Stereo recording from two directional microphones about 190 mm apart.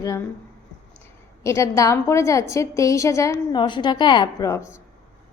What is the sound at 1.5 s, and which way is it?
A woman's voice, 15° left (ahead or behind).